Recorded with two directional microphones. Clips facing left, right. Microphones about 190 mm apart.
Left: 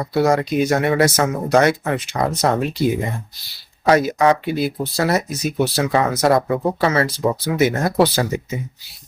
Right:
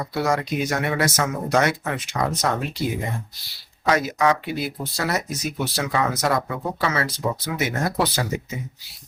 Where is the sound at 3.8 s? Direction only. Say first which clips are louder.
Left 5 dB; 35° left (ahead or behind).